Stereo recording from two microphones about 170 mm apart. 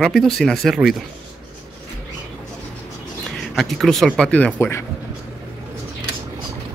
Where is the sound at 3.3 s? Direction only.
Centre (ahead or behind).